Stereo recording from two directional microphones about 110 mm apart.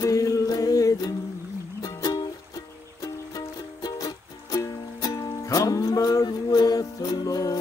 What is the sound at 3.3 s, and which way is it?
Music, 35° left (ahead or behind).